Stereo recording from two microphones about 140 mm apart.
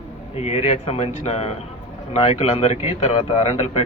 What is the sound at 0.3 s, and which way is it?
A man's voice, 50° left (ahead or behind).